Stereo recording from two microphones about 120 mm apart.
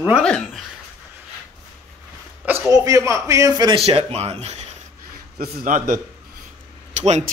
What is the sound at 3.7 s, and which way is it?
Speech, 55° right (ahead or behind).